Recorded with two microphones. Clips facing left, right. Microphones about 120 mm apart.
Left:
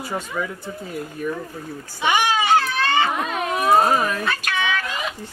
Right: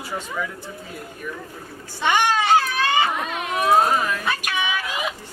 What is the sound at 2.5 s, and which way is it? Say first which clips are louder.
Baby cry: even; 10° right (ahead or behind).